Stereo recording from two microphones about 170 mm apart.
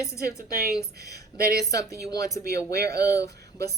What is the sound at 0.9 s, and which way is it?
Speech, 65° right (ahead or behind).